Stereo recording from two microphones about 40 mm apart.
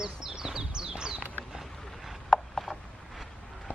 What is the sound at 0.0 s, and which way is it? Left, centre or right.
Bird, centre.